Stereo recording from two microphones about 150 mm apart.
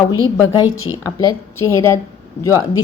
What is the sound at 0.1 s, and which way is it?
A woman's voice, 25° left (ahead or behind).